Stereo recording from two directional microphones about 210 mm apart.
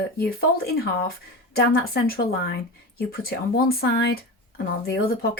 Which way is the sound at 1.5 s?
45° left (ahead or behind).